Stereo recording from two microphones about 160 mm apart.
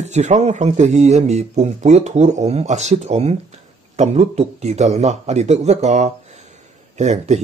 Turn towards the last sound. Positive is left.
turn(degrees=-45)  # may be behind; listen again after turning